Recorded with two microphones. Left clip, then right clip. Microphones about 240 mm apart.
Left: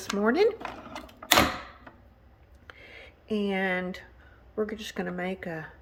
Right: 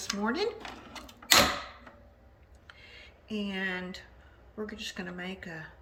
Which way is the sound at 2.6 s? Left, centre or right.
Centre.